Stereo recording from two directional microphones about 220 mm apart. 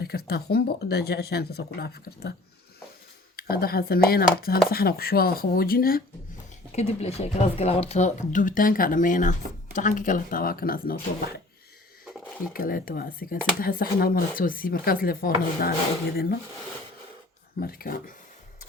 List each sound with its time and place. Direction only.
0.0 s speech: 45° left (ahead or behind)
3.5 s speech: 45° left (ahead or behind)
6.7 s speech: 30° left (ahead or behind)
12.5 s speech: 40° left (ahead or behind)
17.6 s speech: 45° left (ahead or behind)